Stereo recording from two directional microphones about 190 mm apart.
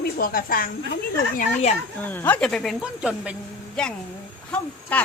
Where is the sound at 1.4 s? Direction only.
35° left (ahead or behind).